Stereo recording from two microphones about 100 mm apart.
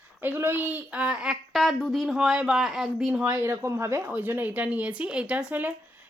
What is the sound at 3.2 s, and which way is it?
Speech, 30° right (ahead or behind).